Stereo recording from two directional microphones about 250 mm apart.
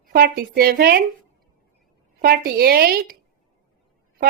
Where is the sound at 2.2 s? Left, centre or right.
Right.